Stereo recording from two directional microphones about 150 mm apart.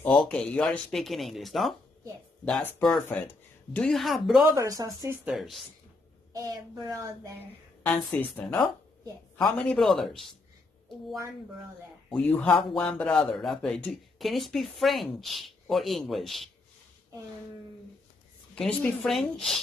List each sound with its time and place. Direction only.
0.2 s speech: 5° left (ahead or behind)
4.5 s child singing: 20° right (ahead or behind)
5.2 s speech: centre (ahead or behind)
6.3 s child singing: 25° right (ahead or behind)
7.8 s a woman's voice: 10° left (ahead or behind)
12.1 s a woman's voice: 10° left (ahead or behind)
18.8 s speech: centre (ahead or behind)